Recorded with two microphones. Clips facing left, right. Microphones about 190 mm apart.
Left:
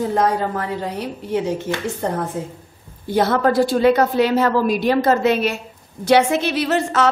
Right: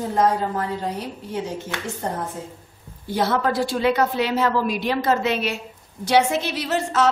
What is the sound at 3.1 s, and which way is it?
A woman's voice, 50° left (ahead or behind).